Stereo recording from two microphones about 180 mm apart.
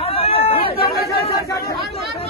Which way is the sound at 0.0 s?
35° left (ahead or behind).